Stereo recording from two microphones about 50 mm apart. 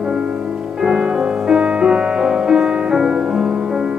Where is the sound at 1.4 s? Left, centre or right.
Centre.